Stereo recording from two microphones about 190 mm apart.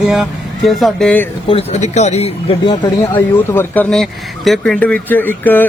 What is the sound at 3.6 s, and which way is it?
Speech, 10° left (ahead or behind).